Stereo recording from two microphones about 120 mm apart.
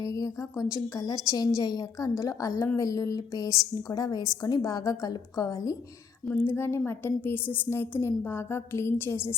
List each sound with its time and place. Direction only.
0.0 s a woman's voice: 30° left (ahead or behind)
6.2 s a woman's voice: 15° left (ahead or behind)